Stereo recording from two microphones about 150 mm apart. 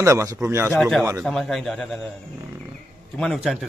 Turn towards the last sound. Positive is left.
turn(degrees=-5)  # may be behind; listen again after turning